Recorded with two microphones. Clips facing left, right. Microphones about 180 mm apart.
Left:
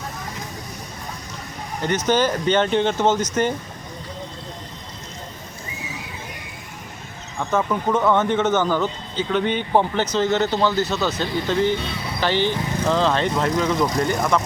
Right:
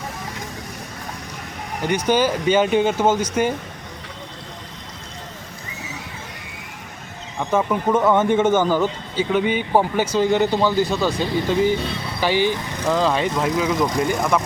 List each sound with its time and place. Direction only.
1.8 s speech: 10° right (ahead or behind)
7.3 s speech: 10° right (ahead or behind)